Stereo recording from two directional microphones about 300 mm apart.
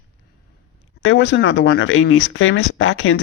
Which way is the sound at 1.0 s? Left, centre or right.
Left.